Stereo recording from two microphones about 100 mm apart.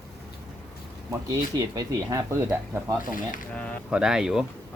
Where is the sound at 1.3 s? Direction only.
35° right (ahead or behind).